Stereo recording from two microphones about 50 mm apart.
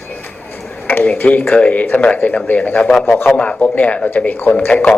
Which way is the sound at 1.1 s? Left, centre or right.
Left.